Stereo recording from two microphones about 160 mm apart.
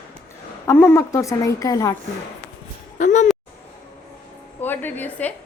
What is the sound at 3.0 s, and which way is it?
Speech, 50° left (ahead or behind).